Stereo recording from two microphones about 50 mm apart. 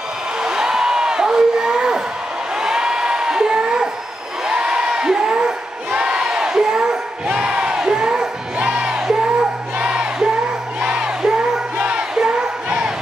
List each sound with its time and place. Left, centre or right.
0.4 s a sound: centre
4.5 s crowd: centre
11.8 s music: centre
12.6 s bow-wow: centre